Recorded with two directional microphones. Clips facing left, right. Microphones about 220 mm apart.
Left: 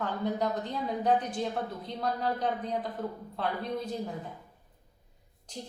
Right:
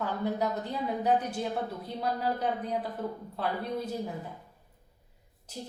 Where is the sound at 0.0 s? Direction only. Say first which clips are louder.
Even; 5° right (ahead or behind).